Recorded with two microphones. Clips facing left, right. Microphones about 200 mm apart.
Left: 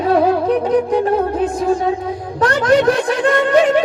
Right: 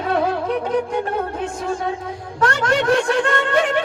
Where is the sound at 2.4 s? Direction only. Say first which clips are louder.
Left 6 dB; 35° left (ahead or behind).